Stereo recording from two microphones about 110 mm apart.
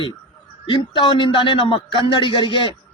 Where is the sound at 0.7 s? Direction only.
45° left (ahead or behind).